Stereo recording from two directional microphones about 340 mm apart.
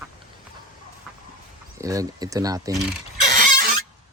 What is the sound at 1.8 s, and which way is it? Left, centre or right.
Speech, centre.